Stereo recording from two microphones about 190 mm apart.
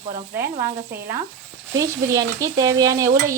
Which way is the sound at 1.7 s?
15° right (ahead or behind).